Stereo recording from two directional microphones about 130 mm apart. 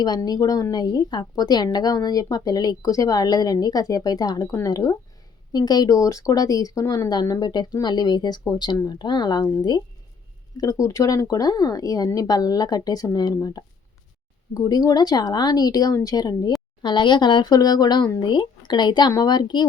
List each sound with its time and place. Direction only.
0.0 s a woman's voice: 30° left (ahead or behind)